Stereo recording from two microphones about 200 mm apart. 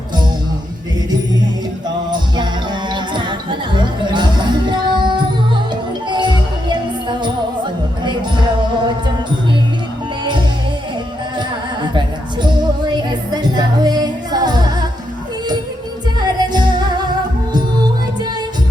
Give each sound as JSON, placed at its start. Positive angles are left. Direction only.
{"t": 2.0, "sound": "music", "side_deg": -20}
{"t": 11.3, "sound": "music", "side_deg": -25}
{"t": 16.2, "sound": "music", "side_deg": -20}